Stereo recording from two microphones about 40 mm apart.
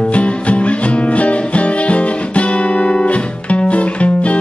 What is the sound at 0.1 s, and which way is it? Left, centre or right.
Music, left.